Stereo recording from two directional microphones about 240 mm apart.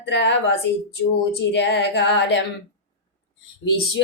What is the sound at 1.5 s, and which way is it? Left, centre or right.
Speech, left.